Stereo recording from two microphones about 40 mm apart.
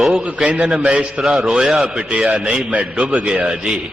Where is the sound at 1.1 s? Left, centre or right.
Centre.